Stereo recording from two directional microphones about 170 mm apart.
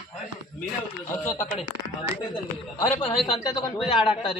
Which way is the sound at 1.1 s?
15° left (ahead or behind).